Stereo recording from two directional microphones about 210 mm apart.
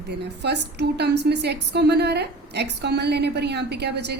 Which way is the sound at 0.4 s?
55° right (ahead or behind).